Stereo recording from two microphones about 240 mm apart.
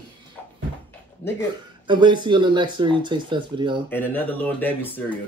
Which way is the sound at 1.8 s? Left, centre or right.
Centre.